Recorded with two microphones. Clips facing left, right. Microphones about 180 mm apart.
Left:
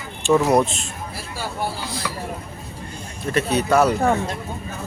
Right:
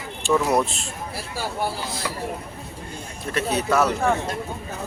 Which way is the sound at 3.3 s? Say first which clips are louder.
Left 3 dB; centre (ahead or behind).